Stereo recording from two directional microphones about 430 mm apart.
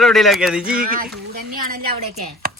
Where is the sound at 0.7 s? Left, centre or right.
Centre.